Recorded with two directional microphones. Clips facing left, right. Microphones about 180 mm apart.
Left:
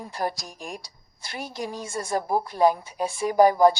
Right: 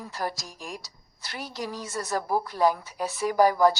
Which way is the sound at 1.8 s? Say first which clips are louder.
Left 3 dB; 25° left (ahead or behind).